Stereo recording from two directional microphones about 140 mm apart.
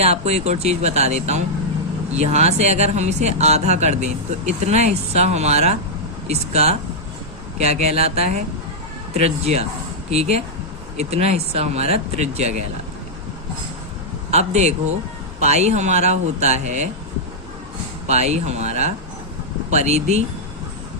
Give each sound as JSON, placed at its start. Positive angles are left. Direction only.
{"t": 0.0, "sound": "speech", "side_deg": -50}
{"t": 14.3, "sound": "speech", "side_deg": -55}
{"t": 18.0, "sound": "speech", "side_deg": -50}